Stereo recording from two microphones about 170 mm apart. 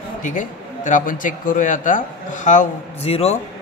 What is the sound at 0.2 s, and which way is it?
Speech, 50° left (ahead or behind).